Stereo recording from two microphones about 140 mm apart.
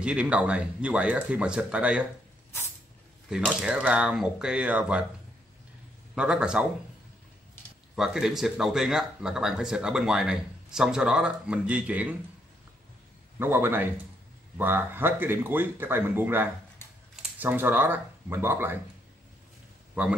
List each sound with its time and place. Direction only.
0.0 s speech: 10° right (ahead or behind)
3.3 s speech: 5° right (ahead or behind)
6.1 s speech: 5° right (ahead or behind)
7.9 s speech: 5° right (ahead or behind)
13.4 s speech: 15° right (ahead or behind)
20.0 s speech: 10° right (ahead or behind)